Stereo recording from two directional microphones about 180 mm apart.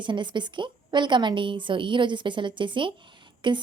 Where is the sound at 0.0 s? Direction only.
25° right (ahead or behind).